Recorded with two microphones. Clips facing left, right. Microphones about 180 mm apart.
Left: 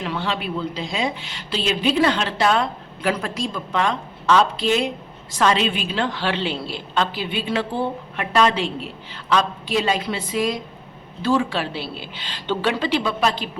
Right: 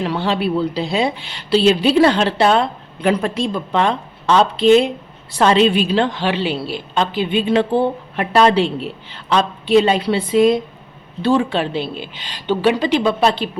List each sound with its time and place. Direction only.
0.0 s a woman's voice: 35° right (ahead or behind)